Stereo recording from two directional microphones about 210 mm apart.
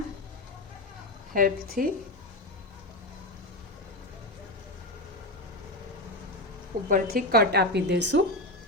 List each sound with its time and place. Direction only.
1.3 s a woman's voice: 40° right (ahead or behind)
6.8 s a woman's voice: 45° right (ahead or behind)